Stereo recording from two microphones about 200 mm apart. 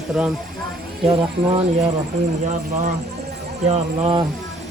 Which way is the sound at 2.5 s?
35° right (ahead or behind).